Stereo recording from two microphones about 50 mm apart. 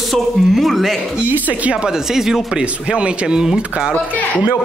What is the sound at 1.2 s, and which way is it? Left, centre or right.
Speech, right.